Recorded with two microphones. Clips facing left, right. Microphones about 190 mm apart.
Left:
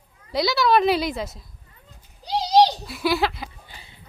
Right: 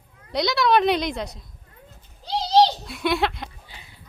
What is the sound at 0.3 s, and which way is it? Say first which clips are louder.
A woman's voice: left 1 dB; centre (ahead or behind).